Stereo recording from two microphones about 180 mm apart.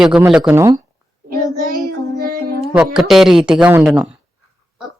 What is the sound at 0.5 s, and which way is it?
Speech, 20° right (ahead or behind).